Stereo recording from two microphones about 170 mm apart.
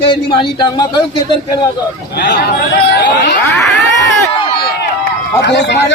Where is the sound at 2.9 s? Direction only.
90° left.